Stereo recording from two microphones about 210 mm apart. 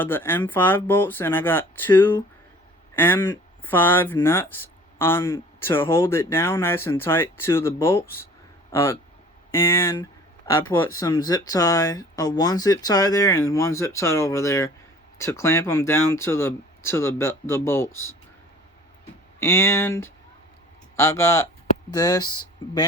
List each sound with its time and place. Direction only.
0.0 s speech: 10° left (ahead or behind)
19.4 s speech: 10° left (ahead or behind)